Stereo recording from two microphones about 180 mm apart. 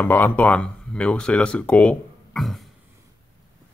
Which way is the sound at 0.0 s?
10° left (ahead or behind).